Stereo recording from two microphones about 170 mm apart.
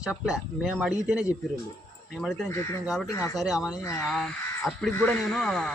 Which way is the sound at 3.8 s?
20° left (ahead or behind).